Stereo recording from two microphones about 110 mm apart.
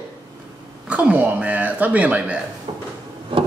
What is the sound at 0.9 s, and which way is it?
Speech, 10° right (ahead or behind).